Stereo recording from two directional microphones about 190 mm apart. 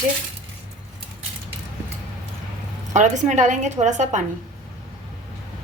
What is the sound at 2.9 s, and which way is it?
A woman's voice, 40° right (ahead or behind).